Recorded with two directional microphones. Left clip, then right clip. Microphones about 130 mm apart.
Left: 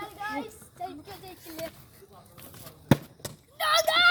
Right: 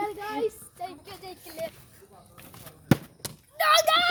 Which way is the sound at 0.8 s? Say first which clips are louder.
Even; 60° right (ahead or behind).